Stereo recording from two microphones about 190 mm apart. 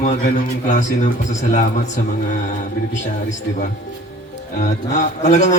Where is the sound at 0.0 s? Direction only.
40° left (ahead or behind).